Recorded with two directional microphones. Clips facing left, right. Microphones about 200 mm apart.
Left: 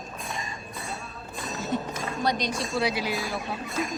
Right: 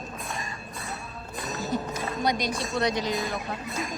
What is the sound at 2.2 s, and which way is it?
A woman's voice, 10° right (ahead or behind).